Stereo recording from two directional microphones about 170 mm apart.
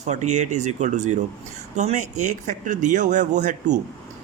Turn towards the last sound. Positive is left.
turn(degrees=-45)  # may be behind; listen again after turning